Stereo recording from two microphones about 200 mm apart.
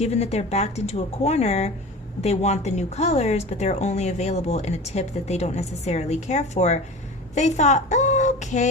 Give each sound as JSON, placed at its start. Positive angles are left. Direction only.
{"t": 0.0, "sound": "a woman's voice", "side_deg": 30}